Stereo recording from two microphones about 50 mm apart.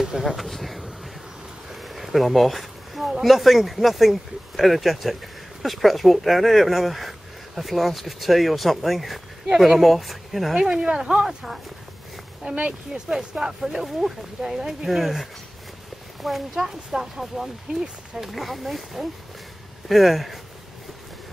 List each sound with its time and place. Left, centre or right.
0.0 s a sound: centre
1.7 s speech: centre
10.5 s speech: centre
12.5 s speech: right
13.1 s speech: centre